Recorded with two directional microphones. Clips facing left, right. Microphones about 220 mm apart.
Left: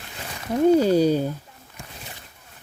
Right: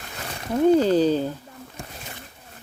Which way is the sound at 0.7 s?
10° left (ahead or behind).